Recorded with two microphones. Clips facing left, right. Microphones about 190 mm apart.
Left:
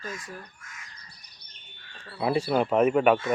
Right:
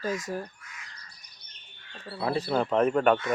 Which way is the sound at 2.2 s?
10° left (ahead or behind).